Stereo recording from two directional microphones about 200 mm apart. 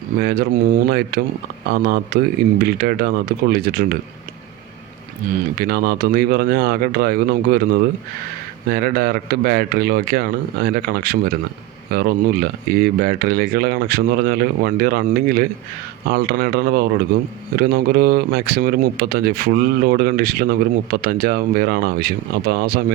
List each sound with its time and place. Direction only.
0.2 s speech: 50° right (ahead or behind)
5.5 s speech: 50° right (ahead or behind)